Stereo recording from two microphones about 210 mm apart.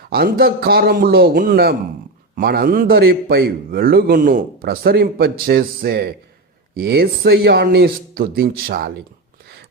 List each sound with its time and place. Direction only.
0.1 s a man's voice: 45° right (ahead or behind)